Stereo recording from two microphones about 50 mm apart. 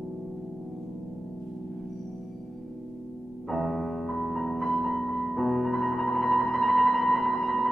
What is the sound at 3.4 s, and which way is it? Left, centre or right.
Music, centre.